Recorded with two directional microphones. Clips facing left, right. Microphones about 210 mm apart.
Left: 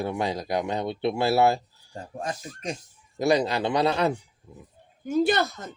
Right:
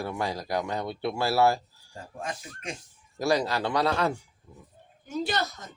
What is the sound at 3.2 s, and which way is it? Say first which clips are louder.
Speech: left 3 dB; 20° left (ahead or behind).